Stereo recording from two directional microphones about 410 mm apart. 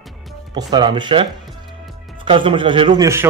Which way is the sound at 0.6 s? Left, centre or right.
Centre.